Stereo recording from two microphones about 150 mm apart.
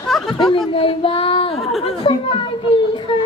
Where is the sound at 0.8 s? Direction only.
35° left (ahead or behind).